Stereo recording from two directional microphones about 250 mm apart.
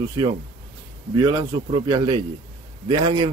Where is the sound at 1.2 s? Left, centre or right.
Centre.